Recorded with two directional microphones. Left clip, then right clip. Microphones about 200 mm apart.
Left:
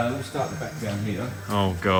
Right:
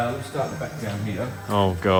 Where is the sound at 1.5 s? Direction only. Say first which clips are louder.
Right 3 dB; 15° right (ahead or behind).